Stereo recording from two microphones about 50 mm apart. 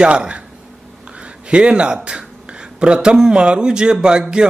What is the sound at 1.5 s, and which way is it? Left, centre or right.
A man's voice, right.